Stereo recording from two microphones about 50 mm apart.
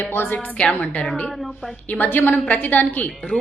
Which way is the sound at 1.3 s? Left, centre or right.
Centre.